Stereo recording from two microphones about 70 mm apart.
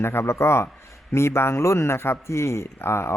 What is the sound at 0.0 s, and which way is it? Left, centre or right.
Speech, left.